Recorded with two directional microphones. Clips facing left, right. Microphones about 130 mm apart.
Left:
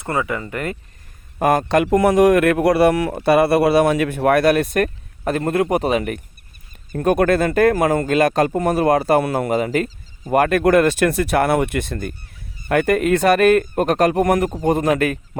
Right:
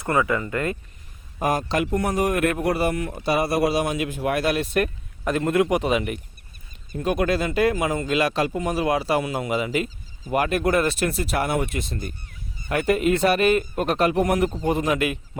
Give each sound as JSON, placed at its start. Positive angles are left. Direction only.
{"t": 0.0, "sound": "speech", "side_deg": 25}
{"t": 1.4, "sound": "speech", "side_deg": 55}
{"t": 6.9, "sound": "speech", "side_deg": 55}